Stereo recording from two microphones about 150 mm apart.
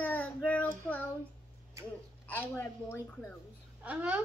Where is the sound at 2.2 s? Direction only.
15° left (ahead or behind).